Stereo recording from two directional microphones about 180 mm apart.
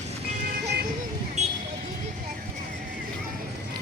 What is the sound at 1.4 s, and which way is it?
Vehicle, 40° right (ahead or behind).